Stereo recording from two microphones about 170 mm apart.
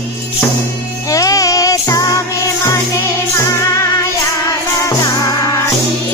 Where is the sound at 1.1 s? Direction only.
20° left (ahead or behind).